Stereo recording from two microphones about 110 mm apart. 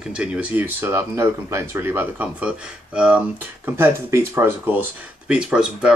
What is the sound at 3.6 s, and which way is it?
Speech, 20° right (ahead or behind).